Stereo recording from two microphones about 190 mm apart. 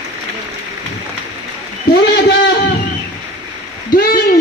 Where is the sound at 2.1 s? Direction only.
60° left (ahead or behind).